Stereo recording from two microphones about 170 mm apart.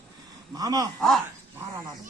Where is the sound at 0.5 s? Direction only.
20° right (ahead or behind).